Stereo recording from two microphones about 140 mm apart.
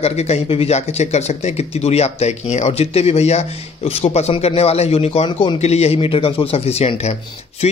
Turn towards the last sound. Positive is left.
turn(degrees=50)  # may be behind; listen again after turning